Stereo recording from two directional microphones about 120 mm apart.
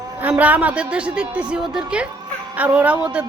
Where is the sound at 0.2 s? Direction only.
15° right (ahead or behind).